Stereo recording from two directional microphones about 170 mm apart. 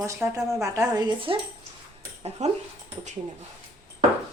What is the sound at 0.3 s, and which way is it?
A woman's voice, 20° right (ahead or behind).